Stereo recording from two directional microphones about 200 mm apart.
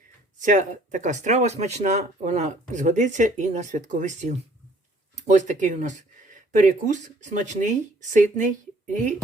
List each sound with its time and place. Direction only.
0.4 s speech: 40° right (ahead or behind)